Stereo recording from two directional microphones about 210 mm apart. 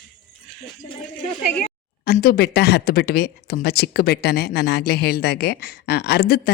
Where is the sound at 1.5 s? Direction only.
45° left (ahead or behind).